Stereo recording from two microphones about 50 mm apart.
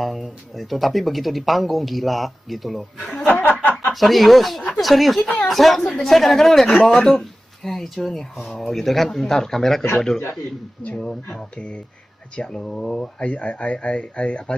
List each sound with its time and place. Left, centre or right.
0.0 s speech: centre
3.1 s speech: left
3.3 s a sound: left
3.9 s speech: centre
12.4 s speech: centre
13.2 s speech: left